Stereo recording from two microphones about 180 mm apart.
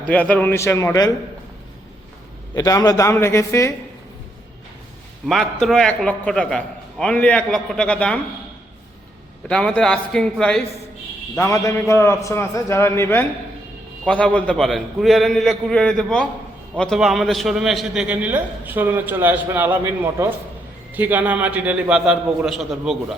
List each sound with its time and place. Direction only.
0.0 s a man's voice: 10° left (ahead or behind)
2.6 s a man's voice: 20° left (ahead or behind)
5.2 s a man's voice: centre (ahead or behind)
9.5 s a man's voice: 5° left (ahead or behind)
11.3 s a man's voice: 15° left (ahead or behind); by 23.1 s centre (ahead or behind)